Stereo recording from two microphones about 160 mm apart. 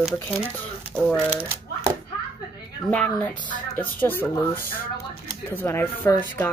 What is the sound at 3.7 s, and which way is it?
Speech, 10° left (ahead or behind).